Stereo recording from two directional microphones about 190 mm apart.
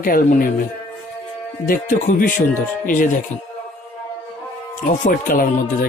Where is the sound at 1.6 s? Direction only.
45° left (ahead or behind).